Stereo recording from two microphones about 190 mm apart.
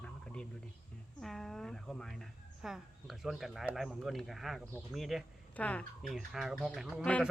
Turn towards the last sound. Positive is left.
turn(degrees=5)  # may be behind; listen again after turning